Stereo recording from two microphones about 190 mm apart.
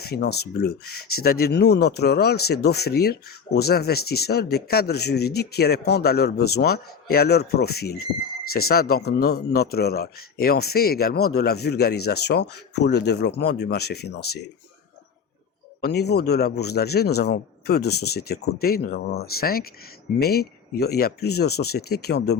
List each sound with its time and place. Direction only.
0.0 s speech: 60° left (ahead or behind)
15.8 s speech: 60° left (ahead or behind)